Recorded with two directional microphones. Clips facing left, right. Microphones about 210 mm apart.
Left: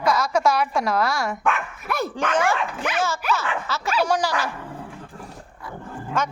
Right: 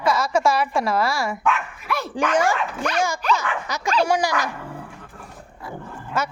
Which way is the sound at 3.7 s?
15° right (ahead or behind).